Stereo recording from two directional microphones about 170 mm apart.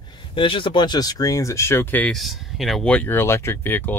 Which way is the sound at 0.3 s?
30° left (ahead or behind).